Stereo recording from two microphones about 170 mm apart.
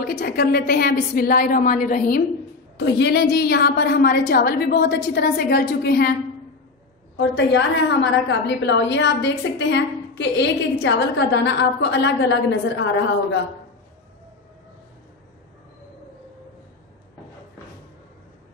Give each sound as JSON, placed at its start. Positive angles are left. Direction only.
{"t": 0.0, "sound": "a woman's voice", "side_deg": 65}
{"t": 2.8, "sound": "a woman's voice", "side_deg": 85}
{"t": 7.2, "sound": "a woman's voice", "side_deg": 90}